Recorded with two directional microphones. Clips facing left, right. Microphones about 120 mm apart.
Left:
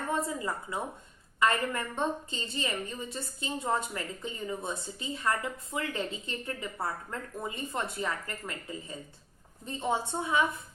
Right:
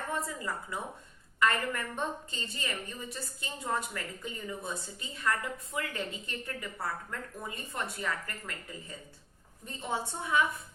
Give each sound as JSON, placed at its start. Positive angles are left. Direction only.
{"t": 0.1, "sound": "a woman's voice", "side_deg": 20}